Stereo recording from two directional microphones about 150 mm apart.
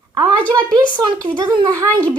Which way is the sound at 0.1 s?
25° right (ahead or behind).